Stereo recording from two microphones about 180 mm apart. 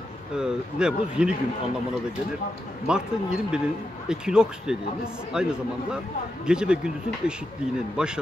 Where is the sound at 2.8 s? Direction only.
5° right (ahead or behind).